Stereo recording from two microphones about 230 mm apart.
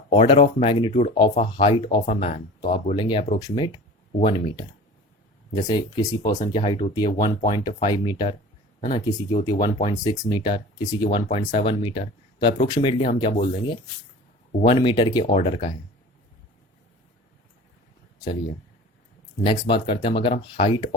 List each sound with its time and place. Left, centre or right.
0.1 s speech: left
9.6 s speech: centre
19.5 s speech: left